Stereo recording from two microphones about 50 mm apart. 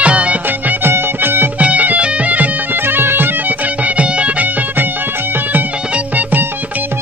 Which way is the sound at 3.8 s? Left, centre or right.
Right.